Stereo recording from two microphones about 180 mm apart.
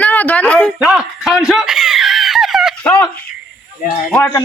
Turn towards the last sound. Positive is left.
turn(degrees=15)  # may be behind; listen again after turning